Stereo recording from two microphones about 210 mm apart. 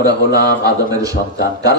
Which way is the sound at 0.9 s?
15° right (ahead or behind).